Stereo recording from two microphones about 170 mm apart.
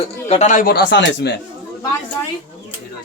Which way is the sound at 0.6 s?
85° left.